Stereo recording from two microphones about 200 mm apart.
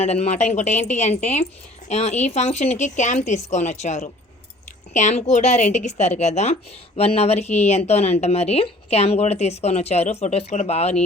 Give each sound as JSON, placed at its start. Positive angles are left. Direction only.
{"t": 0.0, "sound": "a woman's voice", "side_deg": 35}